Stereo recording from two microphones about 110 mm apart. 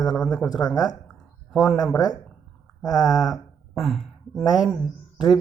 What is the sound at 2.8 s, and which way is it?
Speech, 35° left (ahead or behind).